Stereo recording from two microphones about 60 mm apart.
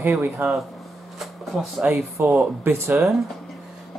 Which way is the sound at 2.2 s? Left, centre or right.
Right.